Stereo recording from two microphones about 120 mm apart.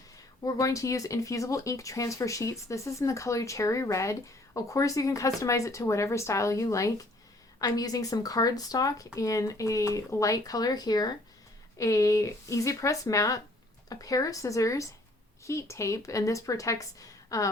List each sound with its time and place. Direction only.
0.4 s speech: 30° left (ahead or behind)